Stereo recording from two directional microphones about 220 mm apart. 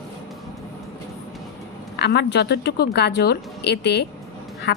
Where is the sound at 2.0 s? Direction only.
50° left (ahead or behind).